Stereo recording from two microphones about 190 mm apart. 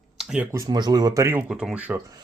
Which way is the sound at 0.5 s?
20° right (ahead or behind).